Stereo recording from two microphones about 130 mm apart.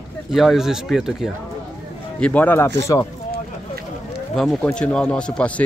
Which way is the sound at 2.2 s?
10° left (ahead or behind).